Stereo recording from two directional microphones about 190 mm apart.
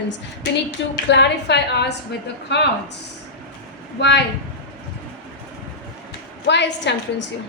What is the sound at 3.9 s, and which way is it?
Speech, 65° left (ahead or behind).